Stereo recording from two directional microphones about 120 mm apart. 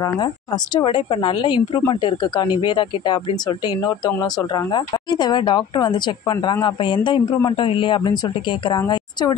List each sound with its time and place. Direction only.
0.7 s speech: 45° left (ahead or behind)